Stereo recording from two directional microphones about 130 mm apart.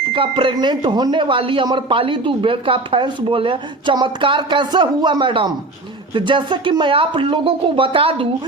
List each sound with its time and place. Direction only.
0.1 s speech: 40° right (ahead or behind)